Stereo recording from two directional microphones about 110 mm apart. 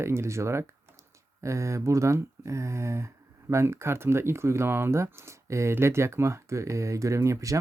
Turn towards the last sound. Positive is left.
turn(degrees=-30)  # may be behind; listen again after turning